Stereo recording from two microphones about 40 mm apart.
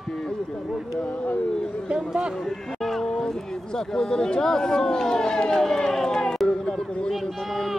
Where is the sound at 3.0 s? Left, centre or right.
Left.